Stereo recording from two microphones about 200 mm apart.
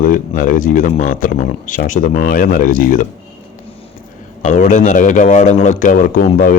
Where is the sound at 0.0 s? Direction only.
40° left (ahead or behind).